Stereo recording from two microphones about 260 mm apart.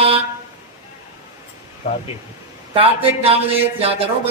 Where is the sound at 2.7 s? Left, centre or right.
Right.